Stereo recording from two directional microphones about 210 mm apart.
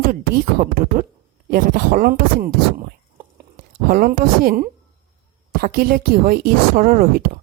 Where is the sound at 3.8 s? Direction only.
45° right (ahead or behind).